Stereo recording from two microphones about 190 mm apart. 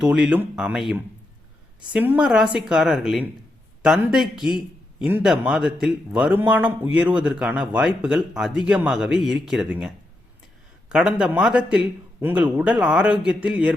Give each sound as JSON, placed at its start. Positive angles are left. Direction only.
{"t": 0.0, "sound": "a man's voice", "side_deg": -5}